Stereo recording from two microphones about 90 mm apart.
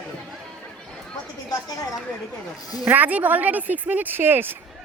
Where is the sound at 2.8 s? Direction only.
20° right (ahead or behind).